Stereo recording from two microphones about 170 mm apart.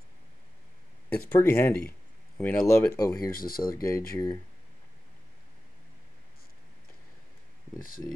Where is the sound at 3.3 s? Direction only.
60° left (ahead or behind).